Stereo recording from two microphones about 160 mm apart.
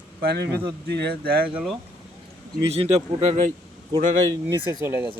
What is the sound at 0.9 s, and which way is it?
Speech, 85° right.